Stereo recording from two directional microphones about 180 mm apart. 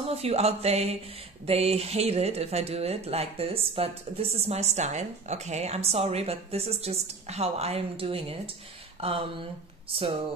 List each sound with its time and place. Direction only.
0.0 s music: 35° right (ahead or behind)
1.4 s speech: 35° right (ahead or behind)